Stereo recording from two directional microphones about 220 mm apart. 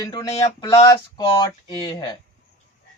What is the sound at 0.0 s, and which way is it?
A man's voice, 15° left (ahead or behind).